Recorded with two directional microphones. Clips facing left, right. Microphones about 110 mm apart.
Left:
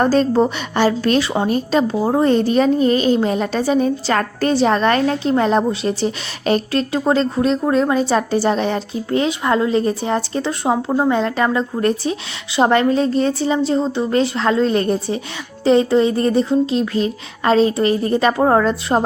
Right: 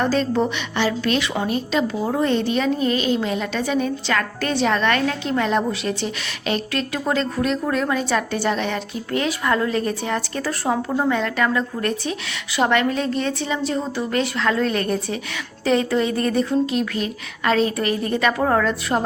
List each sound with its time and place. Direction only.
0.0 s a woman's voice: 40° left (ahead or behind)